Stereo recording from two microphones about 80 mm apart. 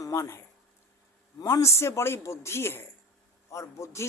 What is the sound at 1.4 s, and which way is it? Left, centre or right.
Speech, left.